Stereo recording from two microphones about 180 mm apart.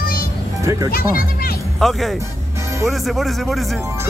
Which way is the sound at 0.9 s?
55° left (ahead or behind).